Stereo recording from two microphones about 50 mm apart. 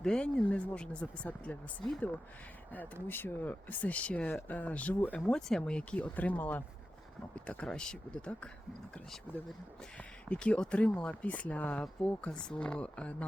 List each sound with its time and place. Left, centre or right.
0.0 s speech: centre
0.4 s speech: left
1.5 s speech: left
2.7 s speech: left
5.2 s speech: centre
6.1 s speech: left
10.2 s speech: left
11.8 s speech: centre